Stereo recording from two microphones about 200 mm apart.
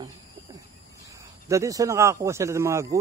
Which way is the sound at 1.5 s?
15° right (ahead or behind).